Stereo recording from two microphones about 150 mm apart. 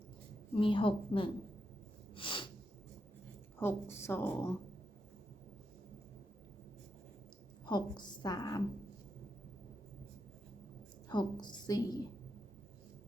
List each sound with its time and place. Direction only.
0.5 s a woman's voice: 35° left (ahead or behind)
2.1 s sneeze: 35° left (ahead or behind)
3.6 s a woman's voice: 15° left (ahead or behind)
7.6 s a woman's voice: 30° left (ahead or behind)
11.1 s a woman's voice: 30° left (ahead or behind)